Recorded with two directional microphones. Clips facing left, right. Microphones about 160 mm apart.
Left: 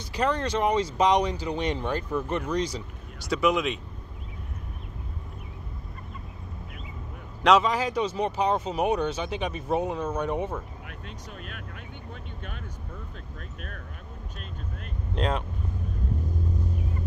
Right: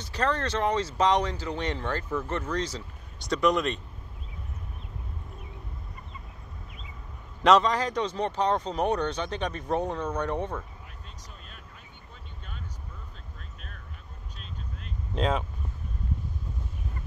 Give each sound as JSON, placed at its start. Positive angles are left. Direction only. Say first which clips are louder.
{"t": 0.0, "sound": "speech", "louder": "left 2 dB", "side_deg": 15}
{"t": 7.4, "sound": "speech", "louder": "even", "side_deg": 5}
{"t": 10.9, "sound": "vehicle", "louder": "left 7 dB", "side_deg": 70}
{"t": 13.6, "sound": "a sound", "louder": "left 7 dB", "side_deg": 55}
{"t": 15.1, "sound": "speech", "louder": "right 1 dB", "side_deg": 0}